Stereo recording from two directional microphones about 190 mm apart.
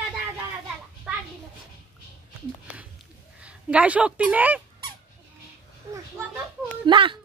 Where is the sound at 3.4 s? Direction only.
5° right (ahead or behind).